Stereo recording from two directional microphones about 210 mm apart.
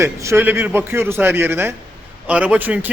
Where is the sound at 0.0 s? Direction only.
15° right (ahead or behind).